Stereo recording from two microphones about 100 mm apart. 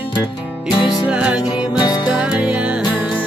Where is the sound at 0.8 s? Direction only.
45° left (ahead or behind).